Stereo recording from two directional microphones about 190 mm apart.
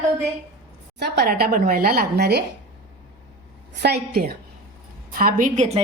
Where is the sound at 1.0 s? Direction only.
60° right (ahead or behind).